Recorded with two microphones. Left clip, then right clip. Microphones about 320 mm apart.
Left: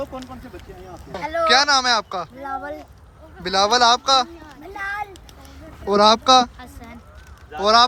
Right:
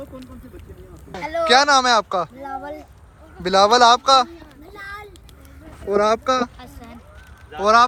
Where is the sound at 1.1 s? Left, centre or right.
Centre.